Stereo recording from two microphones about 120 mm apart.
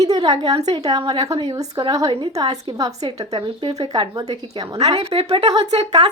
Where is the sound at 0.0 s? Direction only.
30° right (ahead or behind).